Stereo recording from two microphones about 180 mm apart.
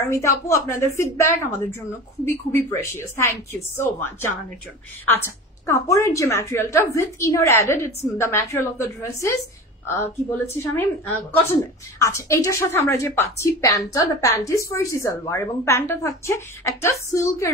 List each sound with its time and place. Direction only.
0.1 s a woman's voice: 15° left (ahead or behind)
10.3 s a woman's voice: 15° left (ahead or behind)